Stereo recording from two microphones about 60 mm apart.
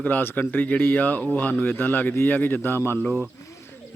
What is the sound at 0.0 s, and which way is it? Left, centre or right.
A man's voice, left.